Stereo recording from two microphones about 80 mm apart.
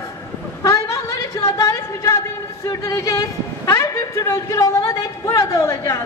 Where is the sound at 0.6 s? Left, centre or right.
Left.